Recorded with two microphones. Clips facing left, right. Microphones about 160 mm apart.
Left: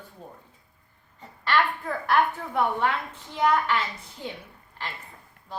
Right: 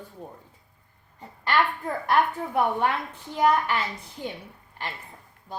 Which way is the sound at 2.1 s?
15° right (ahead or behind).